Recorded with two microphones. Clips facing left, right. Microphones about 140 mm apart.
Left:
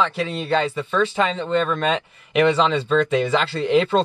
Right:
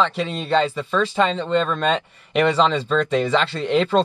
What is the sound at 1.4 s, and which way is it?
Speech, 5° left (ahead or behind).